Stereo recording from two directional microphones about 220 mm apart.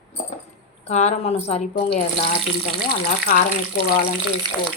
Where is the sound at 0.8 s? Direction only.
30° left (ahead or behind).